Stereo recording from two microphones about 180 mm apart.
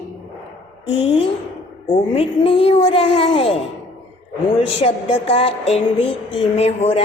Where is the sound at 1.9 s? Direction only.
30° left (ahead or behind).